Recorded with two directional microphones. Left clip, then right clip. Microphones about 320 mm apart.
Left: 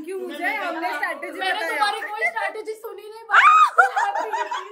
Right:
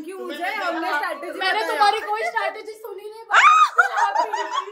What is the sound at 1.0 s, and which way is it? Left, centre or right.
A woman's voice, centre.